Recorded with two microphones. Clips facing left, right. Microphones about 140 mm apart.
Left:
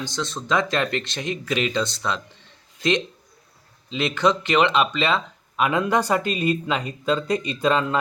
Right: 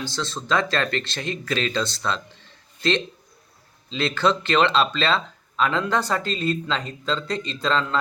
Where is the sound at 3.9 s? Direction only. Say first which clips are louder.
Left 1 dB; 15° left (ahead or behind).